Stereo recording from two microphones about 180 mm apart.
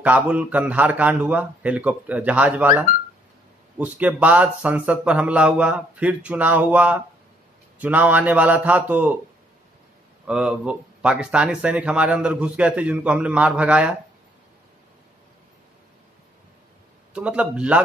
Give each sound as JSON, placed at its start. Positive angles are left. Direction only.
{"t": 0.0, "sound": "speech", "side_deg": -10}
{"t": 10.2, "sound": "speech", "side_deg": -5}
{"t": 17.1, "sound": "speech", "side_deg": -5}